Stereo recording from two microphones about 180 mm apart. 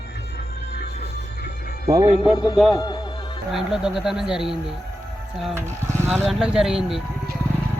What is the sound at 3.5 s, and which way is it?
Speech, centre (ahead or behind).